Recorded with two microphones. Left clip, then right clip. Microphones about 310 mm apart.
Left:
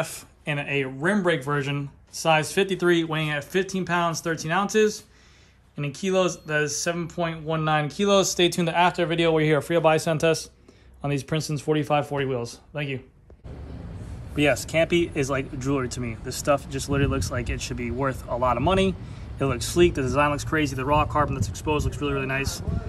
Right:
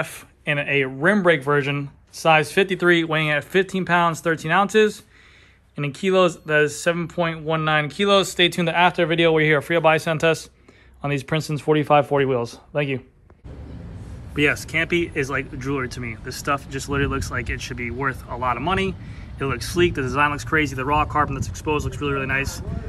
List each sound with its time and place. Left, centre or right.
0.0 s speech: centre
4.6 s speech: centre
5.9 s speech: centre
14.3 s speech: centre